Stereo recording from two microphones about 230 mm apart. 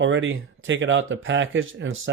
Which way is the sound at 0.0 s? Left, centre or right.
Right.